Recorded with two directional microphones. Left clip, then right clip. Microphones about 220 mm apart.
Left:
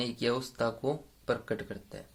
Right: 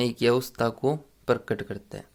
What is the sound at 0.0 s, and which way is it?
Speech, 50° right (ahead or behind).